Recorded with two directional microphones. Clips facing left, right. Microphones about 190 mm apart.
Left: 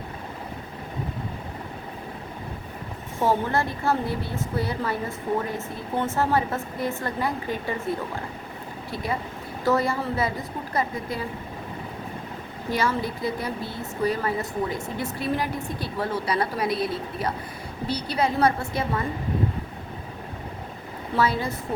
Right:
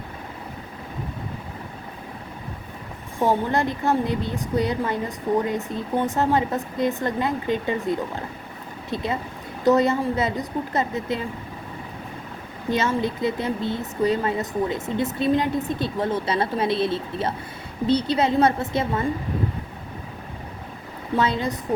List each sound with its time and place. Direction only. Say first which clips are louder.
3.2 s a woman's voice: right 2 dB; 20° right (ahead or behind)
12.7 s a woman's voice: right 3 dB; 20° right (ahead or behind)
21.2 s a woman's voice: right 1 dB; 20° right (ahead or behind)